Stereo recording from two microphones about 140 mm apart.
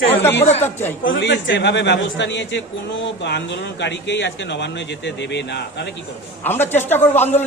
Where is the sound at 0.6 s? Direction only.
15° left (ahead or behind).